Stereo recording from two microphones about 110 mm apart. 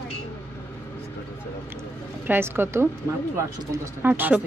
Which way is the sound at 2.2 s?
20° right (ahead or behind).